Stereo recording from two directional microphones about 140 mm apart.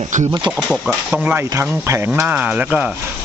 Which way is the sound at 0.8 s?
10° right (ahead or behind).